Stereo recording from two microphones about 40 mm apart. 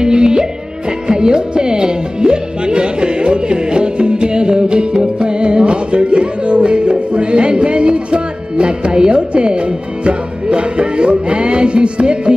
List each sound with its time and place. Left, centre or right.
0.0 s music: centre